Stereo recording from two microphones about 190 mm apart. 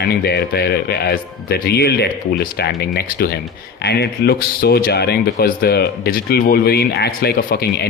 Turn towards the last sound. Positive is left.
turn(degrees=55)  # may be behind; listen again after turning